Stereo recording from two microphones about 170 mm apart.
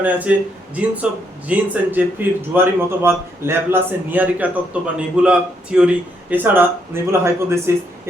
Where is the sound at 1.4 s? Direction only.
10° right (ahead or behind).